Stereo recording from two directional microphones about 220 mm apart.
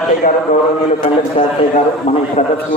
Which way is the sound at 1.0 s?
30° left (ahead or behind).